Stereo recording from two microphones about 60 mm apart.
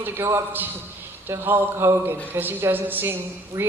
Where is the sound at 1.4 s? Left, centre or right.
Right.